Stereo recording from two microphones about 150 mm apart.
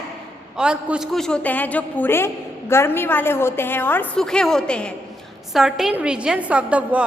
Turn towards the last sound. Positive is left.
turn(degrees=-10)  # may be behind; listen again after turning